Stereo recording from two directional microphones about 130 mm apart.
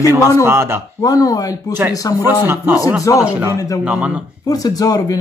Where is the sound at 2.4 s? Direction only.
15° right (ahead or behind).